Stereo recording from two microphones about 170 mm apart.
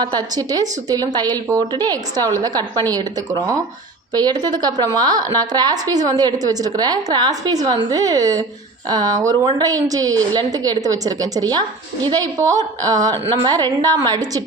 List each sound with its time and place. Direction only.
0.0 s a woman's voice: 25° right (ahead or behind)